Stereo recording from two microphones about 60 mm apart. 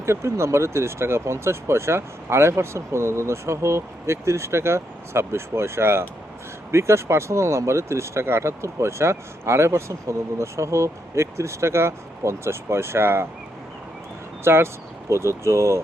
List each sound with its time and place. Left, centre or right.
0.0 s speech: right
14.4 s speech: right